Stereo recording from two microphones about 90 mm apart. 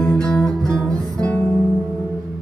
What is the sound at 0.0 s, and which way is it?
Music, 10° left (ahead or behind).